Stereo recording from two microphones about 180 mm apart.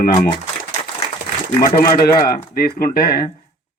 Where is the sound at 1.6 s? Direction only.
55° left (ahead or behind).